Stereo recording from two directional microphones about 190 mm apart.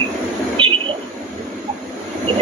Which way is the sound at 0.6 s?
25° right (ahead or behind).